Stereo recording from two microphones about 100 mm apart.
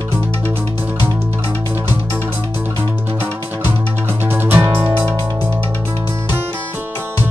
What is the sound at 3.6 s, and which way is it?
Music, 20° right (ahead or behind).